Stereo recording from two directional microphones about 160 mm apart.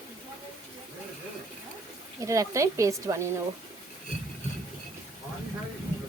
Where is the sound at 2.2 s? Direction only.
20° right (ahead or behind).